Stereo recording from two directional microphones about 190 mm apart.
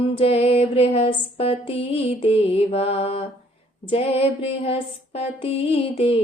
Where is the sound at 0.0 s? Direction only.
30° left (ahead or behind).